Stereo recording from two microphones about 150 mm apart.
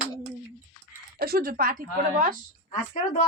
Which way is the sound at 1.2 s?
85° right.